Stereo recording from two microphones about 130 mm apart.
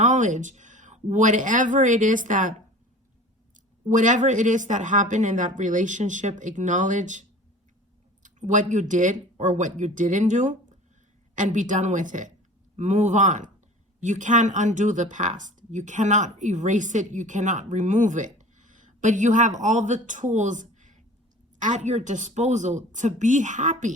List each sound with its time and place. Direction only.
0.0 s speech: 70° right (ahead or behind); by 2.6 s 90° right
3.5 s speech: 80° right
12.7 s speech: 65° right (ahead or behind)